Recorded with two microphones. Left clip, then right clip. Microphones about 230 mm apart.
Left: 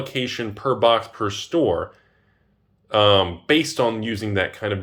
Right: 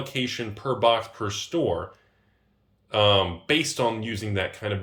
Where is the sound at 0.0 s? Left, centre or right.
Centre.